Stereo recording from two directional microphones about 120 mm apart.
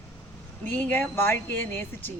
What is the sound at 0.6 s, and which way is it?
Speech, 15° left (ahead or behind).